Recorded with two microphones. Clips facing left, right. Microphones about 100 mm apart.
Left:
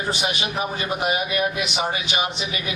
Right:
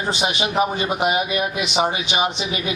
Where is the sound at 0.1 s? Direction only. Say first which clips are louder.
Right 6 dB; 20° right (ahead or behind).